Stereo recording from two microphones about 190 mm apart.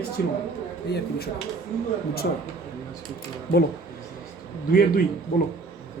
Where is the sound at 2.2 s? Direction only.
60° left (ahead or behind).